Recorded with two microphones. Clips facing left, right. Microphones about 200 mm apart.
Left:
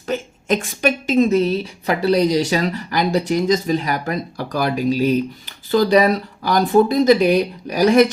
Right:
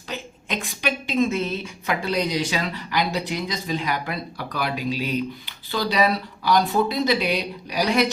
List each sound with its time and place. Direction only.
0.1 s a woman's voice: 45° left (ahead or behind)